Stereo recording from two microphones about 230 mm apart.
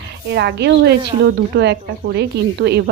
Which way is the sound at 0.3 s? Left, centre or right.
Right.